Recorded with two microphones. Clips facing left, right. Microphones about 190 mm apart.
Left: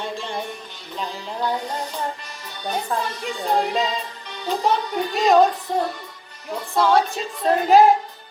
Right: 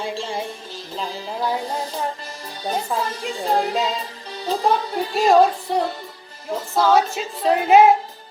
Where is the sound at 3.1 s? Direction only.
35° right (ahead or behind).